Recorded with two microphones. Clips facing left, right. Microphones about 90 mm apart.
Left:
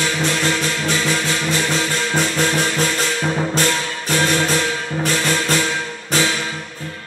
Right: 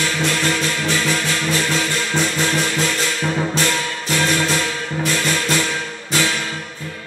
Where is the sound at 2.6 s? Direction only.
20° left (ahead or behind).